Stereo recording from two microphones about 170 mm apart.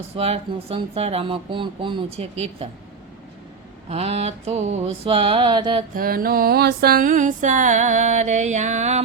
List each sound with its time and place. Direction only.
0.2 s speech: 35° right (ahead or behind)
3.8 s speech: 35° right (ahead or behind)
5.9 s music: 60° right (ahead or behind); by 9.0 s 45° right (ahead or behind)